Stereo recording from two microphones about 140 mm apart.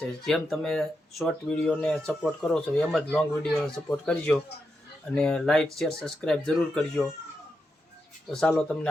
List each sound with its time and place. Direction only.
0.0 s speech: 5° left (ahead or behind)
8.3 s speech: 5° left (ahead or behind)